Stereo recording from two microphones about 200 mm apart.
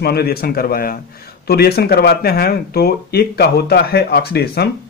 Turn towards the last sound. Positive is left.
turn(degrees=55)  # may be behind; listen again after turning